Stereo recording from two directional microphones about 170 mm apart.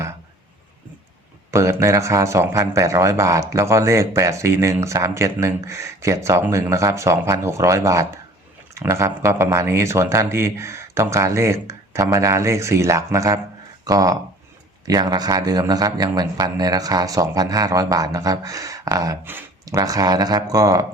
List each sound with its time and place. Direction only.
1.5 s a man's voice: 15° right (ahead or behind)